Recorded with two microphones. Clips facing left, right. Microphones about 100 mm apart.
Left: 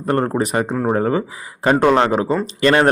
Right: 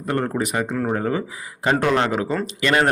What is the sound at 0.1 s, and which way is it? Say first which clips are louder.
Speech: left 5 dB; 40° left (ahead or behind).